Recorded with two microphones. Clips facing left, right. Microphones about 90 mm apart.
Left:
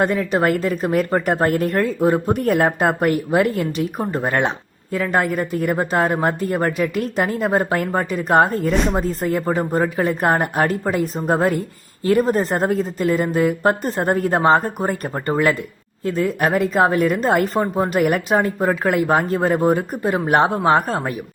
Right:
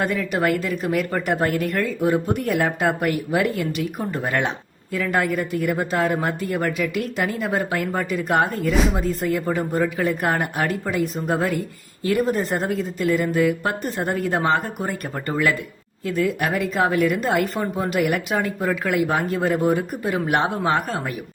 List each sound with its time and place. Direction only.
0.0 s a woman's voice: 30° left (ahead or behind)
8.7 s speech: centre (ahead or behind)
9.0 s a woman's voice: 35° left (ahead or behind)